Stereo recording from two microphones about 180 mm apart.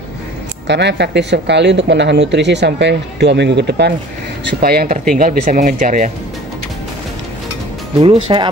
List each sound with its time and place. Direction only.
0.7 s speech: 75° right (ahead or behind); by 6.1 s 45° right (ahead or behind)
8.0 s speech: 30° right (ahead or behind)